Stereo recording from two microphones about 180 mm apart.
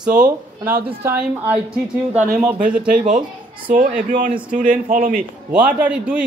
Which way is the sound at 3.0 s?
45° right (ahead or behind).